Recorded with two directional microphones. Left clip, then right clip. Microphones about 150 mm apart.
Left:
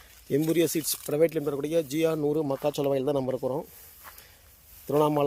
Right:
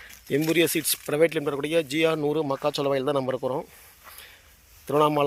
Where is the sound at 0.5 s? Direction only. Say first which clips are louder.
Right 3 dB; 10° left (ahead or behind).